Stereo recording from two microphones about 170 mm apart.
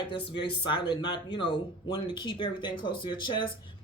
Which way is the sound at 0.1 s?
30° left (ahead or behind).